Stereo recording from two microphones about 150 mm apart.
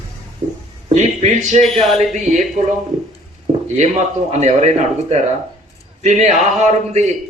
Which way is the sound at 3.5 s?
40° right (ahead or behind).